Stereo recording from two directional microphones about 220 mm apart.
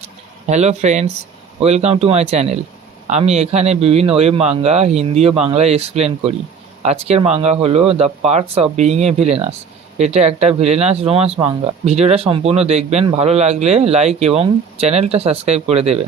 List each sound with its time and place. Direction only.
0.4 s speech: 30° right (ahead or behind)